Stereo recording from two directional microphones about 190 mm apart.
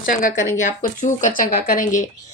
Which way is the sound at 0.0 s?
45° left (ahead or behind).